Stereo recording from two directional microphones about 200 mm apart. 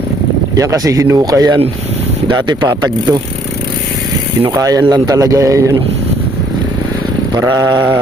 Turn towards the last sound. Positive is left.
turn(degrees=-20)  # may be behind; listen again after turning